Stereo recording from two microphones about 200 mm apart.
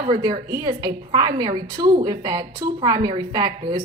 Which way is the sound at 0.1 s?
20° right (ahead or behind).